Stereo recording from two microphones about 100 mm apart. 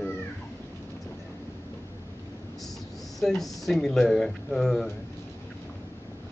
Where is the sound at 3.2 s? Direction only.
Centre (ahead or behind).